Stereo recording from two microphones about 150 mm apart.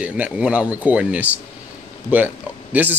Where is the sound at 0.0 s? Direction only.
10° right (ahead or behind).